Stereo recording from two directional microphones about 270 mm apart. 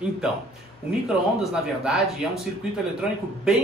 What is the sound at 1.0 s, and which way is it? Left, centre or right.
A man's voice, centre.